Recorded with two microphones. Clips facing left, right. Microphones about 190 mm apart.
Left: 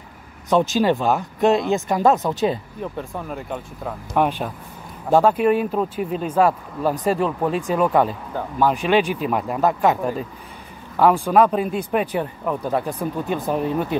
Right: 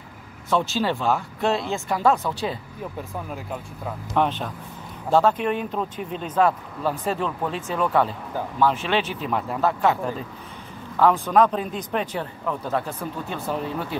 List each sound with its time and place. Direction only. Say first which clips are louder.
0.5 s speech: left 5 dB; 15° left (ahead or behind)
4.1 s speech: left 3 dB; 10° left (ahead or behind)